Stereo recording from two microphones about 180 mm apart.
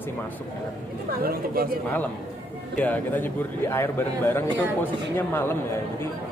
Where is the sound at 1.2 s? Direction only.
55° right (ahead or behind).